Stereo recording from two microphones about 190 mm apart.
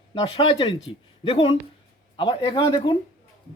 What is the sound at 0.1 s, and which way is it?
A woman's voice, 25° left (ahead or behind).